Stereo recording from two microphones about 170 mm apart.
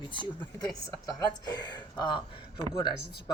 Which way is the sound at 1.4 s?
25° left (ahead or behind).